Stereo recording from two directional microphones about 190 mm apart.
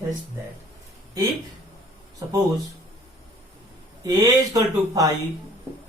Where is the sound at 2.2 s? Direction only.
15° right (ahead or behind).